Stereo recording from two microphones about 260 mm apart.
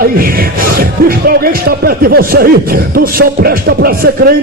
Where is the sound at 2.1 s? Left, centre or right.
Right.